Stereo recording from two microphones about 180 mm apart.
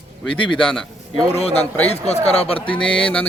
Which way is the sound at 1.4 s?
35° left (ahead or behind).